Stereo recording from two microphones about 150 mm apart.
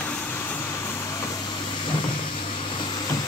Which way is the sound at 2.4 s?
40° left (ahead or behind).